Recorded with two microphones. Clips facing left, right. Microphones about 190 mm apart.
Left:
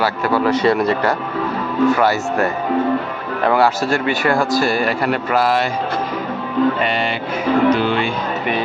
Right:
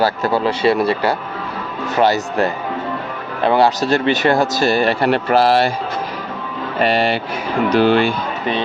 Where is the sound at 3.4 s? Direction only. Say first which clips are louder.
Right 1 dB; 25° right (ahead or behind).